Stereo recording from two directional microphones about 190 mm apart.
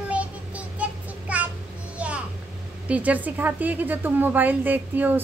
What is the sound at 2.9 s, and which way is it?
A woman's voice, 10° right (ahead or behind).